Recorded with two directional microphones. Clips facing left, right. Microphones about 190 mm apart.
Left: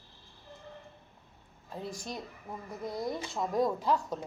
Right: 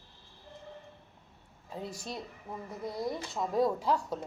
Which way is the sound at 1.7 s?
10° left (ahead or behind).